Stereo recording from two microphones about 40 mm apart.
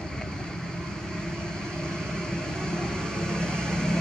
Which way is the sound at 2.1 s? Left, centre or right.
Centre.